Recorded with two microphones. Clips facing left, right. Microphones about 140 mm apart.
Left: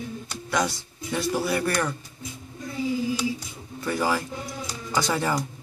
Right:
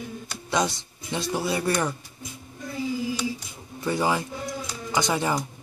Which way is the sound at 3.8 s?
20° right (ahead or behind).